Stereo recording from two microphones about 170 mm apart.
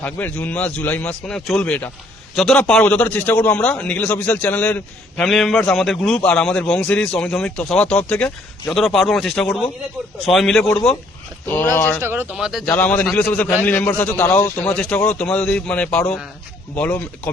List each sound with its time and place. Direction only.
0.0 s a man's voice: 10° left (ahead or behind)
12.0 s speech: 10° right (ahead or behind)
12.6 s a man's voice: 10° left (ahead or behind)